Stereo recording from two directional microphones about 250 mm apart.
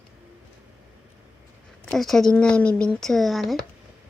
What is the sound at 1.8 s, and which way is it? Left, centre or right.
A woman's voice, centre.